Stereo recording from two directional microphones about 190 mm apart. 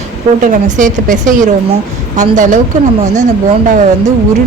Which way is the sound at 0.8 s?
45° right (ahead or behind).